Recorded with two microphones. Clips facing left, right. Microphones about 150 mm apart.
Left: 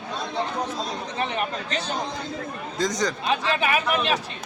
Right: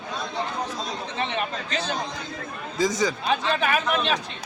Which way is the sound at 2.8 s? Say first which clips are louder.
Right 2 dB; 5° right (ahead or behind).